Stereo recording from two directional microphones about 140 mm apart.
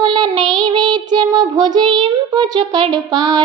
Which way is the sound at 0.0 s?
30° right (ahead or behind).